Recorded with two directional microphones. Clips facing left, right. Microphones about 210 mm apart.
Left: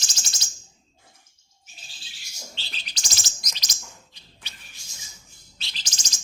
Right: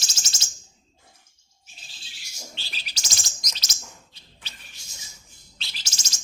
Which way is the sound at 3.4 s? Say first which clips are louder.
Even; 10° left (ahead or behind).